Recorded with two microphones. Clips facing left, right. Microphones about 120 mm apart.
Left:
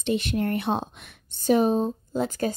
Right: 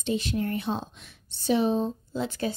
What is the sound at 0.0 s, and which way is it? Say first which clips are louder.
A woman's voice: left 3 dB; 65° left (ahead or behind).